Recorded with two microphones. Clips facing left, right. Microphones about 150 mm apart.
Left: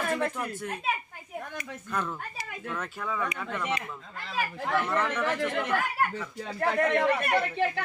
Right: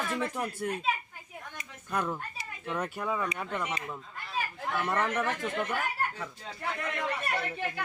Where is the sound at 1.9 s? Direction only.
15° right (ahead or behind).